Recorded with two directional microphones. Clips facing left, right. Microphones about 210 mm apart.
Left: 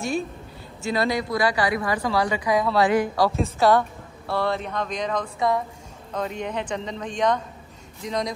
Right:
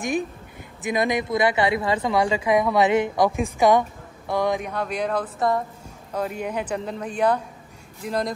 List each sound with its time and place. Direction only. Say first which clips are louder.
0.8 s a woman's voice: right 1 dB; 20° right (ahead or behind)